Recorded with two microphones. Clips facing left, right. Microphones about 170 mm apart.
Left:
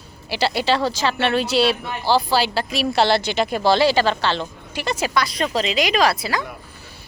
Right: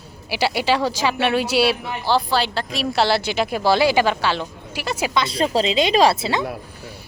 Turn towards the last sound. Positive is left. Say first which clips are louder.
# right 3 dB
turn(degrees=-25)  # may be behind; listen again after turning